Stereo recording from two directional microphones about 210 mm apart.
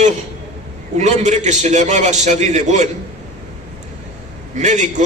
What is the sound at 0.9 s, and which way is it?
A man's voice, 35° right (ahead or behind).